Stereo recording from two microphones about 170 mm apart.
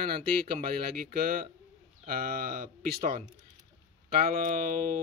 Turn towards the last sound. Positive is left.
turn(degrees=-55)  # may be behind; listen again after turning